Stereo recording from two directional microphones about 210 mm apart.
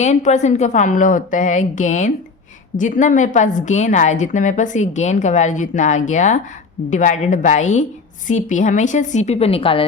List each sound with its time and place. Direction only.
0.0 s a woman's voice: 35° left (ahead or behind)